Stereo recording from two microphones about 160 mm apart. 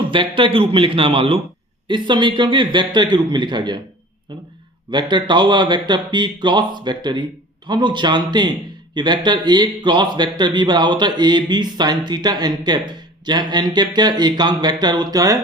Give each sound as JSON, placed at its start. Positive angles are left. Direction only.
{"t": 0.1, "sound": "a man's voice", "side_deg": -30}
{"t": 4.9, "sound": "speech", "side_deg": -30}